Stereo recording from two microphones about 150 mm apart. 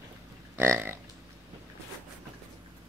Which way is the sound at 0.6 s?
15° right (ahead or behind).